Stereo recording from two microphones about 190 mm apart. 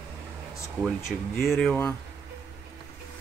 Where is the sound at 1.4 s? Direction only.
Centre (ahead or behind).